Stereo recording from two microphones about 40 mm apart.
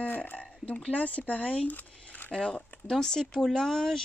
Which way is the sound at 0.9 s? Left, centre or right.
Left.